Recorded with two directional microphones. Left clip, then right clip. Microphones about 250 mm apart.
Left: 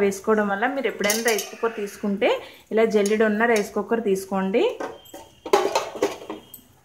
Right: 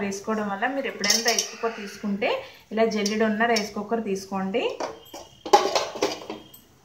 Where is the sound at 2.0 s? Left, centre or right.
Left.